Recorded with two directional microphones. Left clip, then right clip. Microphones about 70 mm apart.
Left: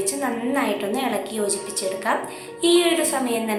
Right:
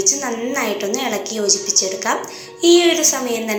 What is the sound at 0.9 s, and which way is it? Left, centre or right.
A woman's voice, right.